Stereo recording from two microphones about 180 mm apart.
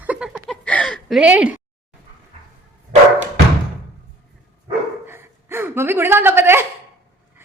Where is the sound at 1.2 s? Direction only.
5° right (ahead or behind).